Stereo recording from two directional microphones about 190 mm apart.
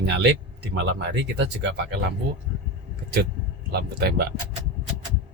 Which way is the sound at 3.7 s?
55° right (ahead or behind).